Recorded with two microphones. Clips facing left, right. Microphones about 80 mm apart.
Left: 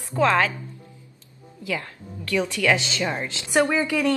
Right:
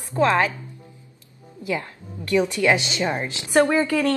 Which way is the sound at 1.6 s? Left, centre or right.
Right.